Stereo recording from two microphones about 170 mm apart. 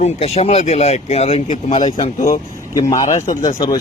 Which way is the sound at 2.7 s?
20° left (ahead or behind).